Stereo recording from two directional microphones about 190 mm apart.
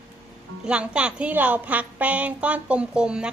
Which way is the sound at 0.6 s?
5° right (ahead or behind).